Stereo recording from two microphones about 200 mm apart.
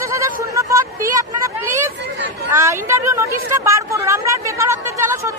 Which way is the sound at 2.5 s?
15° right (ahead or behind).